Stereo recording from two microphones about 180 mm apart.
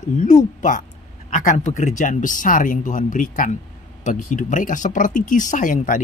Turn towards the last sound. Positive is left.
turn(degrees=45)  # may be behind; listen again after turning